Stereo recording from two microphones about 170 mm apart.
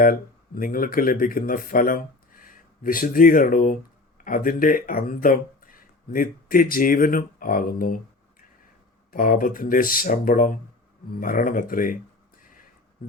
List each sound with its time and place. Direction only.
0.0 s speech: 55° left (ahead or behind)